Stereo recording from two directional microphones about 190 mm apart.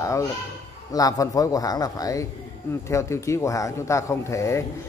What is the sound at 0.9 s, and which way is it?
A man's voice, 20° left (ahead or behind).